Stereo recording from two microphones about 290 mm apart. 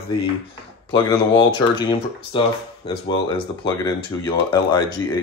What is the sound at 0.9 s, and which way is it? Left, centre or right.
Speech, centre.